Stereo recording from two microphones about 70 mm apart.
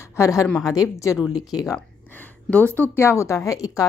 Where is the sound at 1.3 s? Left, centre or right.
Left.